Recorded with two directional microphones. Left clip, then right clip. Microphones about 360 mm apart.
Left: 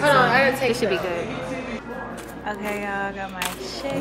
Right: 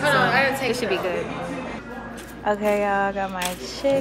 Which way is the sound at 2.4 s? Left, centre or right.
Centre.